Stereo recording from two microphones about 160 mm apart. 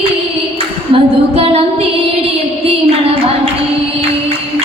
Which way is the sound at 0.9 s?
40° right (ahead or behind).